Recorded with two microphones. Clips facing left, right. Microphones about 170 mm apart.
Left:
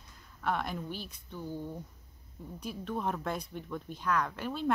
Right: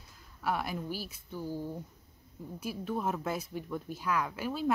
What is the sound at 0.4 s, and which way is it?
Speech, 5° right (ahead or behind).